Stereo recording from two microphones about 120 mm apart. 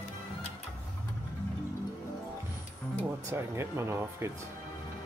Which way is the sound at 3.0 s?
20° right (ahead or behind).